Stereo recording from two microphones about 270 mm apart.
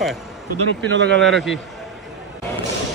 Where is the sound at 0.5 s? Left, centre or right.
Right.